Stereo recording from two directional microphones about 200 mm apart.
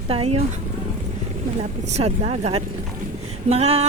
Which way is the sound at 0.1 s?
30° right (ahead or behind).